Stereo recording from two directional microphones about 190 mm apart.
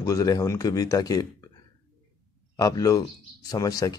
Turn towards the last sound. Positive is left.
turn(degrees=20)  # may be behind; listen again after turning